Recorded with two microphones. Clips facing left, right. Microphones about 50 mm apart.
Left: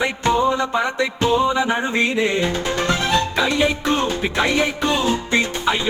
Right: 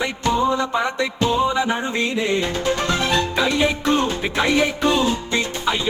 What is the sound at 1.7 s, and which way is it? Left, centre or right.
Music, left.